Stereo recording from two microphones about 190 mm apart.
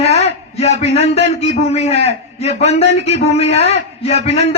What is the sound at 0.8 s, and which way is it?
A man's voice, 35° left (ahead or behind).